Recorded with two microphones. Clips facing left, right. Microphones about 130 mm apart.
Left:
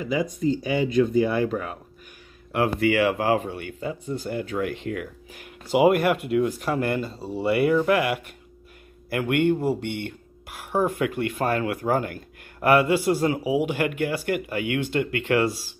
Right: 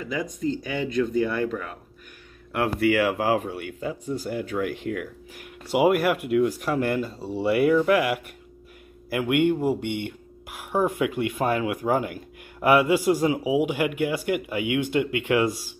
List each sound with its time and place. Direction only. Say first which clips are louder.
0.0 s speech: left 3 dB; 15° left (ahead or behind)
2.5 s speech: even; centre (ahead or behind)